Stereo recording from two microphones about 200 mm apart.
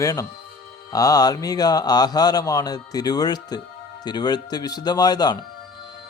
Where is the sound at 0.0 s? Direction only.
15° left (ahead or behind).